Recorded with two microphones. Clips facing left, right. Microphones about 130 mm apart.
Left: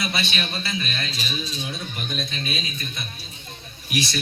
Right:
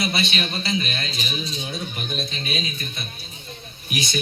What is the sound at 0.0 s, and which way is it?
A man's voice, 25° right (ahead or behind).